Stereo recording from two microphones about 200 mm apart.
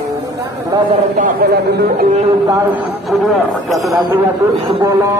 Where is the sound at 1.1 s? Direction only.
45° right (ahead or behind).